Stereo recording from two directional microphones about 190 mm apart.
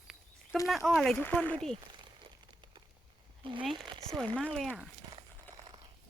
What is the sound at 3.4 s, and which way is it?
Speech, 25° right (ahead or behind).